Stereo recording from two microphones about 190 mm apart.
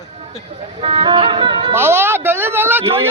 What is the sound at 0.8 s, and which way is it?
Speech, 25° right (ahead or behind).